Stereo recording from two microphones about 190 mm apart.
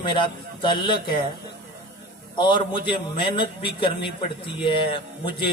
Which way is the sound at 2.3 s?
25° left (ahead or behind).